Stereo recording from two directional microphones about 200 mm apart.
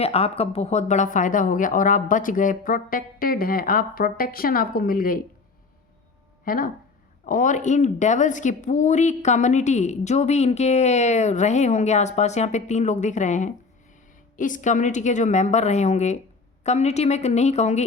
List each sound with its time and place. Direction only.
0.0 s speech: 30° left (ahead or behind)
6.4 s speech: 45° left (ahead or behind)